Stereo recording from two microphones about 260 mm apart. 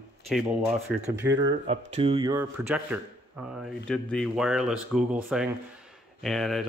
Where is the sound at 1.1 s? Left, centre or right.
Centre.